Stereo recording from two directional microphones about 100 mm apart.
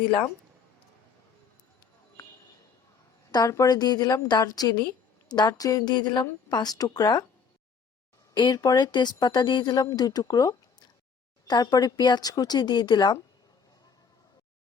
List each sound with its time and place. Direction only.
3.3 s a woman's voice: 35° left (ahead or behind)
8.4 s speech: 45° left (ahead or behind)